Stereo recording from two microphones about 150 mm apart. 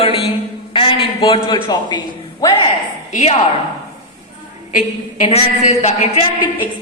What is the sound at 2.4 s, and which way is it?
Speech, 25° left (ahead or behind).